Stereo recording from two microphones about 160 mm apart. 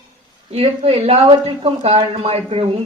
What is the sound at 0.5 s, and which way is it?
Speech, 40° right (ahead or behind).